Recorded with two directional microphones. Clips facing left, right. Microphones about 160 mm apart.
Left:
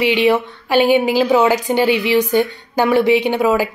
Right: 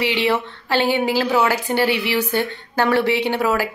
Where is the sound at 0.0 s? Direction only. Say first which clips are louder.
Left 5 dB; 15° left (ahead or behind).